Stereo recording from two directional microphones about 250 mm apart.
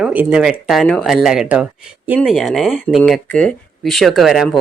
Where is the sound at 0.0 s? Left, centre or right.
Centre.